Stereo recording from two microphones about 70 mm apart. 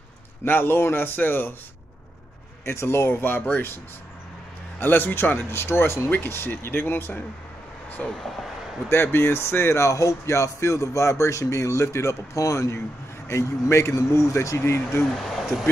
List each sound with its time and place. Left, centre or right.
0.5 s speech: left
2.6 s speech: left
4.7 s speech: left
6.0 s speech: left
8.2 s speech: centre
8.8 s speech: left
14.6 s speech: left
15.1 s speech: centre